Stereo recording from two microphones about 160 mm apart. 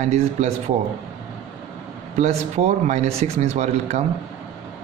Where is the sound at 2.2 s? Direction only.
45° right (ahead or behind).